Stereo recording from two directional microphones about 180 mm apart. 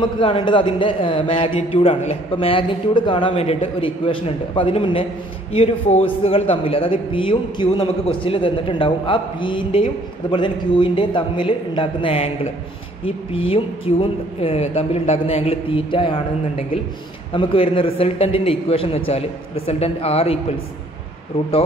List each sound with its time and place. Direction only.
0.0 s a man's voice: 25° left (ahead or behind)